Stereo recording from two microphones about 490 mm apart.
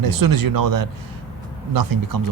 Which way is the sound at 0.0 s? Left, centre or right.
Right.